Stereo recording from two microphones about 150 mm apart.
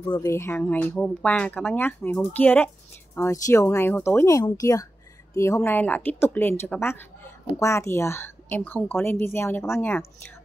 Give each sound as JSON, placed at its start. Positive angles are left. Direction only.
{"t": 0.2, "sound": "a woman's voice", "side_deg": 20}